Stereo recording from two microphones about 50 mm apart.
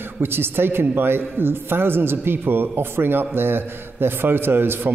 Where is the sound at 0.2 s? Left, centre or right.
Right.